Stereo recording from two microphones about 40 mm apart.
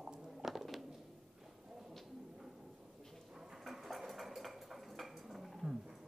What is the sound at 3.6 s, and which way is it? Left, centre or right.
Dishes, centre.